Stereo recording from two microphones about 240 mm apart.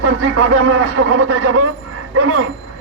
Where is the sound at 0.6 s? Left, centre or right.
Right.